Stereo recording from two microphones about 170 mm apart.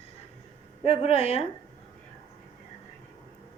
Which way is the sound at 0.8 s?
35° left (ahead or behind).